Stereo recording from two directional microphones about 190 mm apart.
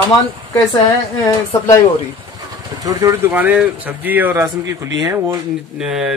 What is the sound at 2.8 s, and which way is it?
Speech, 20° right (ahead or behind).